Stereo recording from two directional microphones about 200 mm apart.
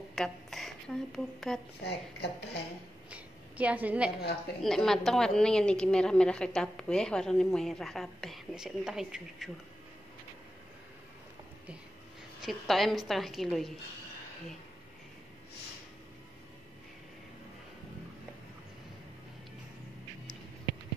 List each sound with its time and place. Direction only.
0.1 s a woman's voice: centre (ahead or behind)
1.8 s speech: 55° left (ahead or behind)
3.1 s a woman's voice: 5° right (ahead or behind)
12.4 s a woman's voice: centre (ahead or behind)